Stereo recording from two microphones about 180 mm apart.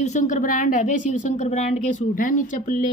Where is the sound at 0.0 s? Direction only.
40° left (ahead or behind).